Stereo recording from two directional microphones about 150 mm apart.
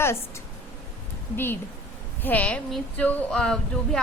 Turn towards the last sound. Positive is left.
turn(degrees=5)  # may be behind; listen again after turning